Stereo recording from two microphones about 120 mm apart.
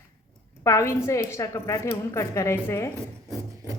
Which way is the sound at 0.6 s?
25° left (ahead or behind).